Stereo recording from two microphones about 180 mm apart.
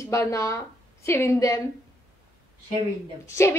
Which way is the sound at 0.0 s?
15° left (ahead or behind).